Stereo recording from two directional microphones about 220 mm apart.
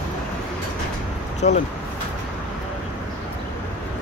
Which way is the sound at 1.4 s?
30° left (ahead or behind).